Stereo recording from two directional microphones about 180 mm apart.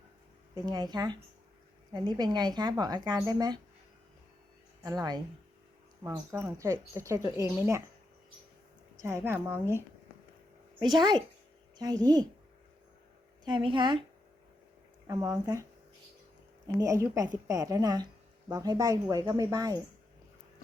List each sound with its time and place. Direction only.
0.5 s speech: 20° right (ahead or behind)
4.8 s speech: 20° right (ahead or behind)
9.0 s speech: 15° right (ahead or behind)
10.9 s speech: 25° right (ahead or behind)
13.4 s speech: 25° right (ahead or behind)
15.0 s speech: 20° right (ahead or behind)
16.6 s speech: 20° right (ahead or behind)